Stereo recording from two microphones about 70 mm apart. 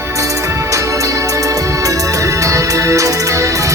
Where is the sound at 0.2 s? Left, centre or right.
Right.